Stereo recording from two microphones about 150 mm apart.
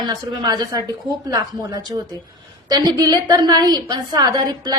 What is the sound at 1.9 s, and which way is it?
A woman's voice, 30° right (ahead or behind).